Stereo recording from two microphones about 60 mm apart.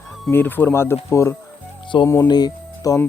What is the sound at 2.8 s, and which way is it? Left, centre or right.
Speech, left.